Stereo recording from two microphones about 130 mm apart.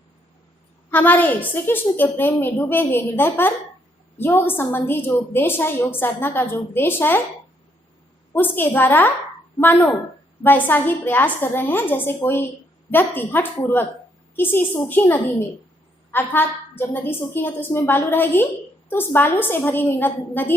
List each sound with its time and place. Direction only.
0.9 s a woman's voice: 15° left (ahead or behind)
8.3 s a woman's voice: 15° left (ahead or behind)